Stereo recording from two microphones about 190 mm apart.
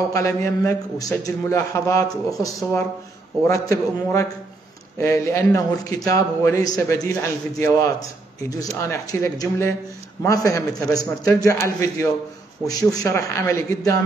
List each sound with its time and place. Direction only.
0.1 s a man's voice: 15° left (ahead or behind)